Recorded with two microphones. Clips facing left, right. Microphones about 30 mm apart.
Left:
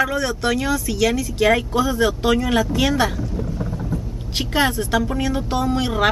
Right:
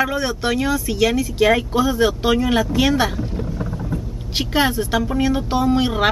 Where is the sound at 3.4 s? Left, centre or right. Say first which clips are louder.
Even; right.